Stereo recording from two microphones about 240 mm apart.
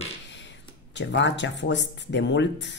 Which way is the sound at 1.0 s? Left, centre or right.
Left.